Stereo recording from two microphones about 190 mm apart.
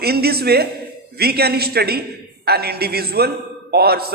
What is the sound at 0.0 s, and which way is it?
A man's voice, 55° right (ahead or behind).